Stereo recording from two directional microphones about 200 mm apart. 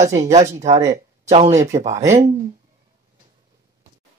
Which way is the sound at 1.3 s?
35° right (ahead or behind).